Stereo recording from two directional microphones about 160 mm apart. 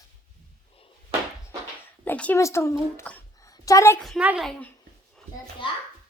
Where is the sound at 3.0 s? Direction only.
20° left (ahead or behind).